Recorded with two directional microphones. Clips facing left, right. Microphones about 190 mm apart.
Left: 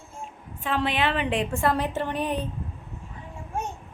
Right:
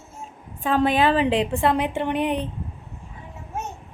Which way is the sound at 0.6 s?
45° right (ahead or behind).